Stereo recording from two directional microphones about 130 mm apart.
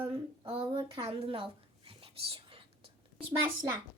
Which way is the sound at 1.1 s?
45° right (ahead or behind).